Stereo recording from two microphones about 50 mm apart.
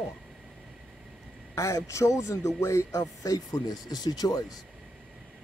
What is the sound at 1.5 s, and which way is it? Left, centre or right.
A man's voice, left.